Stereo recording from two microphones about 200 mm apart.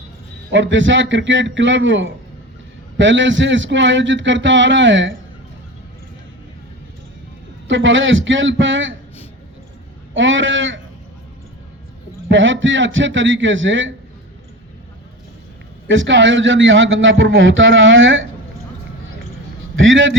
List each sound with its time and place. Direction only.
0.5 s a man's voice: 65° right (ahead or behind)
7.7 s a man's voice: 70° right (ahead or behind)
10.2 s a man's voice: 70° right (ahead or behind)
12.3 s a man's voice: 70° right (ahead or behind)
15.9 s a man's voice: 70° right (ahead or behind)
19.7 s a man's voice: 75° right (ahead or behind)